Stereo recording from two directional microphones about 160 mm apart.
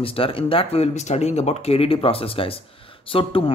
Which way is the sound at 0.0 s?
35° left (ahead or behind).